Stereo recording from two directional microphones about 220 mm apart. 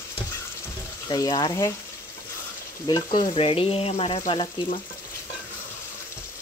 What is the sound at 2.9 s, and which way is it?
Frying, 15° left (ahead or behind).